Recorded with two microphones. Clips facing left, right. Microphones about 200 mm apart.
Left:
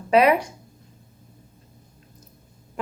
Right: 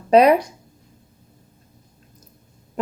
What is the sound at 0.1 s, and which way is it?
Speech, 35° right (ahead or behind).